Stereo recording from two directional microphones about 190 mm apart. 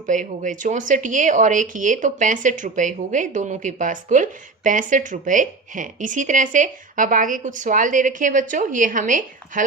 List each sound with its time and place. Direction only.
0.1 s a woman's voice: 40° right (ahead or behind)